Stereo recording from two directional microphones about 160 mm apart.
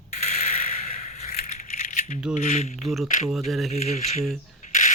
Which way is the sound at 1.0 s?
45° left (ahead or behind).